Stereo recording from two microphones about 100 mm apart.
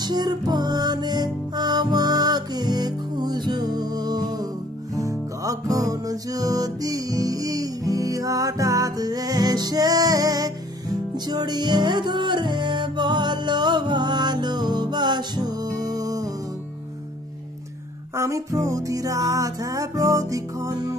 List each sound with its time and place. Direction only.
0.0 s music: 45° right (ahead or behind)
18.1 s music: 30° right (ahead or behind)